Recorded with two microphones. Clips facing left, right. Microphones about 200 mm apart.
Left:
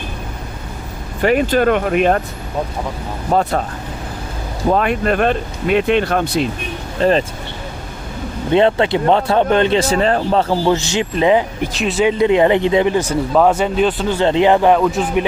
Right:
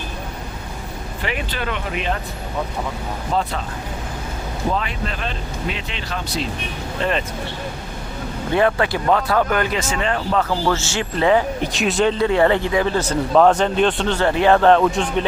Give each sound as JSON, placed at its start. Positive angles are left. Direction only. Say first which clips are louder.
{"t": 1.2, "sound": "speech", "louder": "left 13 dB", "side_deg": 45}
{"t": 3.3, "sound": "speech", "louder": "left 6 dB", "side_deg": 50}
{"t": 4.7, "sound": "speech", "louder": "left 12 dB", "side_deg": 55}
{"t": 7.0, "sound": "speech", "louder": "left 8 dB", "side_deg": 35}
{"t": 8.5, "sound": "speech", "louder": "left 5 dB", "side_deg": 25}
{"t": 10.7, "sound": "speech", "louder": "left 5 dB", "side_deg": 20}
{"t": 11.7, "sound": "speech", "louder": "left 2 dB", "side_deg": 0}
{"t": 12.0, "sound": "speech", "louder": "left 4 dB", "side_deg": 20}
{"t": 14.2, "sound": "speech", "louder": "left 3 dB", "side_deg": 20}
{"t": 14.8, "sound": "speech", "louder": "left 2 dB", "side_deg": 0}